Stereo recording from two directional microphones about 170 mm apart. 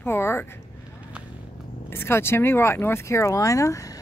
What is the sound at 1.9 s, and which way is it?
Speech, 15° left (ahead or behind).